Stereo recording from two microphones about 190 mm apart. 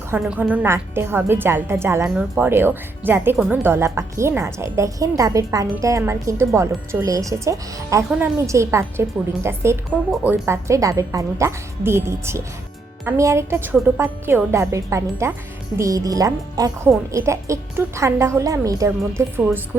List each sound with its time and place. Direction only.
0.1 s a woman's voice: 10° right (ahead or behind)